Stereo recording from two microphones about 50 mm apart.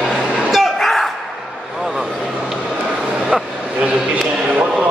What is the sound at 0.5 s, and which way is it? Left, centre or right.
Train, centre.